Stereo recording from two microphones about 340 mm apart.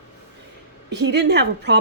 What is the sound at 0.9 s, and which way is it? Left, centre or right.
Speech, right.